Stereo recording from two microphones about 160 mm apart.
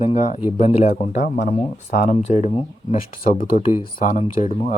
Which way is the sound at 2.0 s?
45° left (ahead or behind).